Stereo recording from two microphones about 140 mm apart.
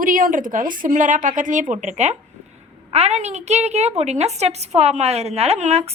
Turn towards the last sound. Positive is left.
turn(degrees=-50)  # may be behind; listen again after turning